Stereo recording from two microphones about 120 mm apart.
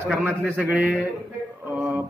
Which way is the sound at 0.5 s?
15° right (ahead or behind).